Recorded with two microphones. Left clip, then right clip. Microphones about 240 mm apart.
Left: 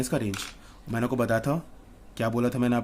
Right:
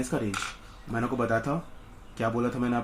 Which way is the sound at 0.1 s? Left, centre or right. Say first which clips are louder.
Even; left.